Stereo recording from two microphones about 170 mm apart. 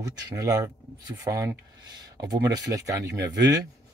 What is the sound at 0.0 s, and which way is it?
Speech, 20° right (ahead or behind).